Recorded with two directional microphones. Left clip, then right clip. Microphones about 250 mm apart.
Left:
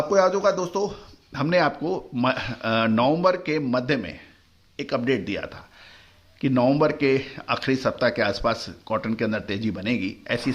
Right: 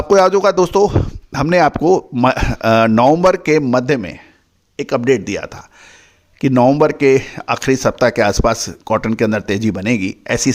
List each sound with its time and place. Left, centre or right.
0.1 s speech: right